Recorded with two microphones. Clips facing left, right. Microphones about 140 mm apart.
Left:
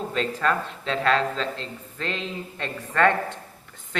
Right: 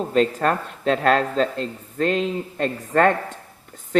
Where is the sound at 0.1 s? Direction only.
45° right (ahead or behind).